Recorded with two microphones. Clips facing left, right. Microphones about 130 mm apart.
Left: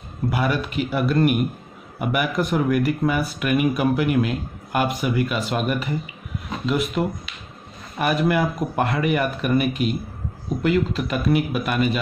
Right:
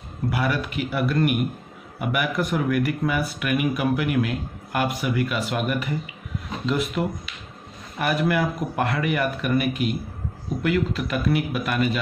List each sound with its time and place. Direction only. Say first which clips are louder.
0.3 s speech: left 2 dB; 25° left (ahead or behind)
7.0 s speech: left 2 dB; 30° left (ahead or behind)